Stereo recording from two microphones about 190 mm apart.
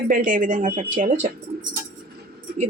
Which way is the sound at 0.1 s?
45° right (ahead or behind).